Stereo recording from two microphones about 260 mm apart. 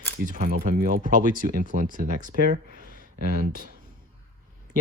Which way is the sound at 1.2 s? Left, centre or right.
Left.